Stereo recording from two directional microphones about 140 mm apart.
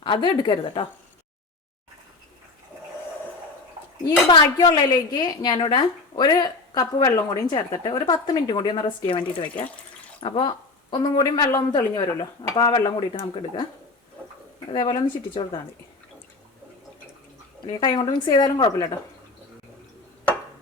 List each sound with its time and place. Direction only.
0.0 s a woman's voice: 35° left (ahead or behind)
4.3 s a woman's voice: 30° left (ahead or behind)
10.2 s a woman's voice: 35° left (ahead or behind)
14.8 s a woman's voice: 35° left (ahead or behind)
17.7 s a woman's voice: 35° left (ahead or behind)